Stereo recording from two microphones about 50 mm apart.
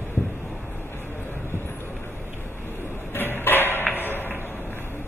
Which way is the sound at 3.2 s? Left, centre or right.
Left.